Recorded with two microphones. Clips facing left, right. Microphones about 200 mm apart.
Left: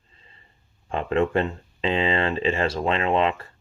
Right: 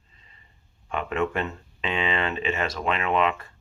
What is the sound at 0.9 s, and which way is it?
Speech, 30° left (ahead or behind).